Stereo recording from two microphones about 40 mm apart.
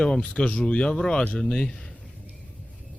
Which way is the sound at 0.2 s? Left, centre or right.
Left.